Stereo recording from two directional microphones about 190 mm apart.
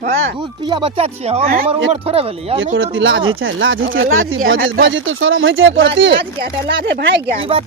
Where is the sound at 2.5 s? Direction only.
90° right; by 7.3 s 65° right (ahead or behind).